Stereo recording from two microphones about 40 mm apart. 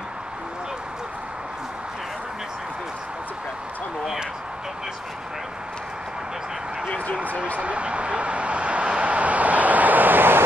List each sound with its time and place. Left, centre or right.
7.5 s vehicle: right